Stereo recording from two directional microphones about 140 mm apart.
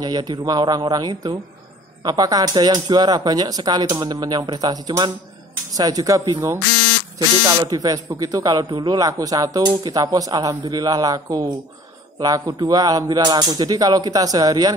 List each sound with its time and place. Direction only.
0.0 s a man's voice: 30° right (ahead or behind)